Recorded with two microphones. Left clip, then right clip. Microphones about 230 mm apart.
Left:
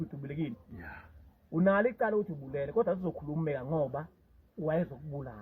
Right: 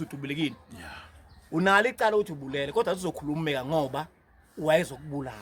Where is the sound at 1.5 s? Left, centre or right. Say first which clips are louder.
Right 5 dB; right.